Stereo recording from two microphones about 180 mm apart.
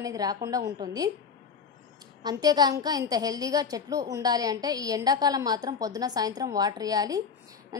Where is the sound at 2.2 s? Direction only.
20° right (ahead or behind).